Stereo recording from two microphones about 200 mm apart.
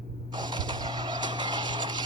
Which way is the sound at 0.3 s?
20° right (ahead or behind).